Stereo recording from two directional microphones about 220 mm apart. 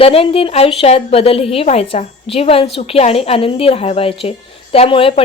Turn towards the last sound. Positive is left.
turn(degrees=25)  # may be behind; listen again after turning